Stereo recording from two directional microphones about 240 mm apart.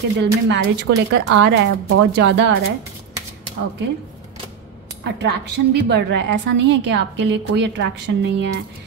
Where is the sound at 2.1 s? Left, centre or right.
Right.